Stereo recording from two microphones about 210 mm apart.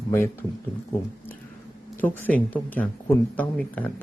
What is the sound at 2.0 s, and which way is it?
Speech, 10° left (ahead or behind).